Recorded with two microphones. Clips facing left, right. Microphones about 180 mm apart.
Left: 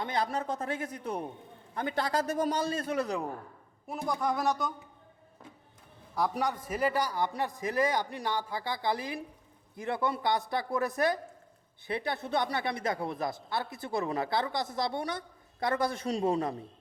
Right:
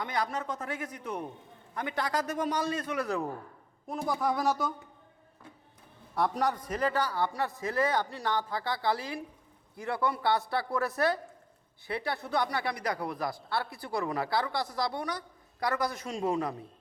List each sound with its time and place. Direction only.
0.0 s a man's voice: 25° left (ahead or behind)
3.8 s speech: centre (ahead or behind)
6.1 s speech: centre (ahead or behind); by 16.6 s 30° left (ahead or behind)